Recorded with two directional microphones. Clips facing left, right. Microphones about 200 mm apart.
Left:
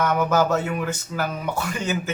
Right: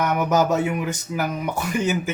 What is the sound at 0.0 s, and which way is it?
Speech, 15° right (ahead or behind).